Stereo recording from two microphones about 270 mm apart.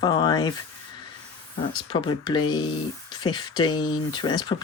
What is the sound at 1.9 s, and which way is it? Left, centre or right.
Speech, centre.